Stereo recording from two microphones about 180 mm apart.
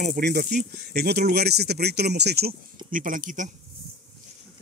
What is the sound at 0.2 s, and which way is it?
Speech, 60° right (ahead or behind).